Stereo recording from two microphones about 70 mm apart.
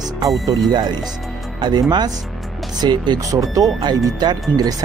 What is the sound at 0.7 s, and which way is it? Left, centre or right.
Speech, right.